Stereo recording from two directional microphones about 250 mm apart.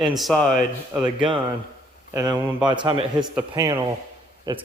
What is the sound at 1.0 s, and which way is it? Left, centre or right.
A man's voice, centre.